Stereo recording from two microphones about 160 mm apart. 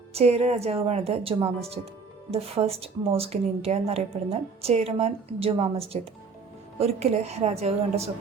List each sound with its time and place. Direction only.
0.1 s speech: 40° right (ahead or behind)